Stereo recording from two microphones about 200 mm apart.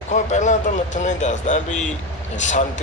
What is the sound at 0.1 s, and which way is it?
A man's voice, 35° left (ahead or behind).